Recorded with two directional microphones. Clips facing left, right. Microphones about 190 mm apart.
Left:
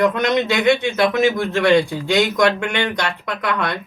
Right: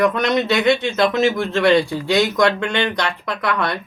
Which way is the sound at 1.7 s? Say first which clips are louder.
Even; 20° left (ahead or behind).